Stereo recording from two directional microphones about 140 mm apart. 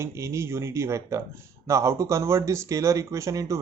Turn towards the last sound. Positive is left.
turn(degrees=-25)  # may be behind; listen again after turning